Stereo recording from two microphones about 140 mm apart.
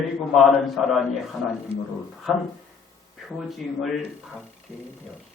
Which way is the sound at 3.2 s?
Centre (ahead or behind).